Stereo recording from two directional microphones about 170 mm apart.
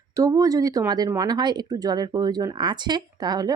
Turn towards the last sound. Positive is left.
turn(degrees=-25)  # may be behind; listen again after turning